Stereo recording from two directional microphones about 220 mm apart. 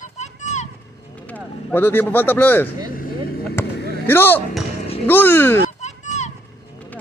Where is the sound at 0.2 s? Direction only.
30° left (ahead or behind).